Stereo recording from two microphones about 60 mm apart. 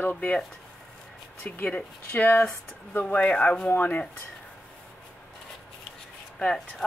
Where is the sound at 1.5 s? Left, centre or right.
Left.